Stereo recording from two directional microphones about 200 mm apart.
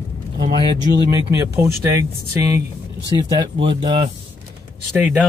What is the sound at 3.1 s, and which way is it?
Speech, 20° right (ahead or behind).